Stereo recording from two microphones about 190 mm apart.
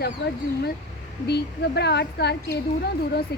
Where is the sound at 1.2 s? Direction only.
60° left (ahead or behind).